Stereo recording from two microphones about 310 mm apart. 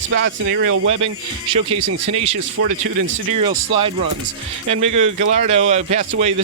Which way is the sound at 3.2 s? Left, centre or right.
Right.